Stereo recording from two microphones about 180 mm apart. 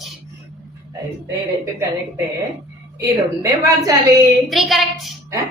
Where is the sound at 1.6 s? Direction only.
15° right (ahead or behind).